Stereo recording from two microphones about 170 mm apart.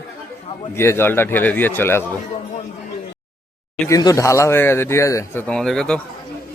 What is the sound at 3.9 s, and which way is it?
Speech, 20° left (ahead or behind).